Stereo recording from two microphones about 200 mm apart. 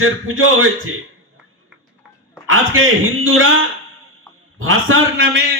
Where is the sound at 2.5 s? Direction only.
90° right.